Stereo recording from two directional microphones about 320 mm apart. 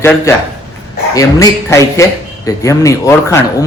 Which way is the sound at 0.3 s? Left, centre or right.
Centre.